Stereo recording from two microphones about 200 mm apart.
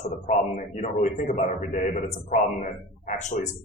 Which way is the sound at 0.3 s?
40° left (ahead or behind).